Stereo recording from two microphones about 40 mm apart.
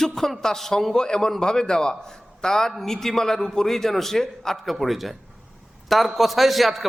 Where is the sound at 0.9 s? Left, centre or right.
Centre.